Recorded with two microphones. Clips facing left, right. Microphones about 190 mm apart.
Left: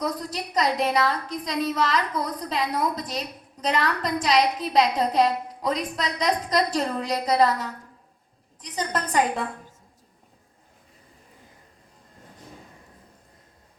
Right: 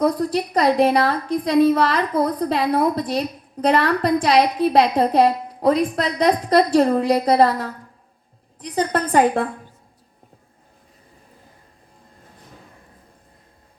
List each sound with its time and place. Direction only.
0.0 s a woman's voice: 55° right (ahead or behind)